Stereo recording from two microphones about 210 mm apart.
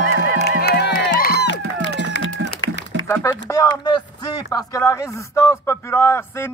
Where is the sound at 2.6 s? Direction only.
65° left (ahead or behind).